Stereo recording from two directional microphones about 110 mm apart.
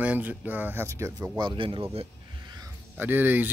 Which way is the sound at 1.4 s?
50° right (ahead or behind).